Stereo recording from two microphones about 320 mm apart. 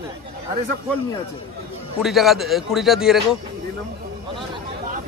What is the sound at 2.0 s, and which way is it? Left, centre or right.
Speech, centre.